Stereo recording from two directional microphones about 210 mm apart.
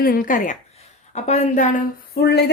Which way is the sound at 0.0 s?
45° left (ahead or behind).